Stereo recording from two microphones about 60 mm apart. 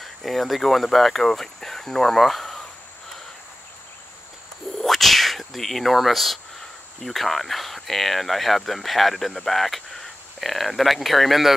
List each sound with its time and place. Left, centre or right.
0.0 s speech: centre
4.7 s a sound: centre
7.0 s speech: centre